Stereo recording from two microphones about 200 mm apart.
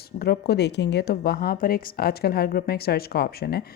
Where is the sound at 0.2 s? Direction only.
55° left (ahead or behind).